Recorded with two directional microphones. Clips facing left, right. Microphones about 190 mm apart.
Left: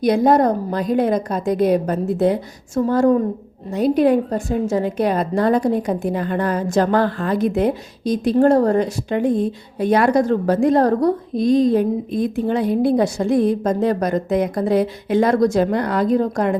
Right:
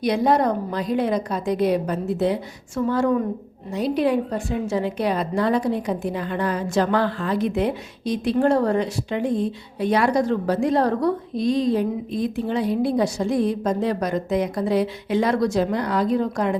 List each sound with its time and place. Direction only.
0.0 s a woman's voice: 45° left (ahead or behind)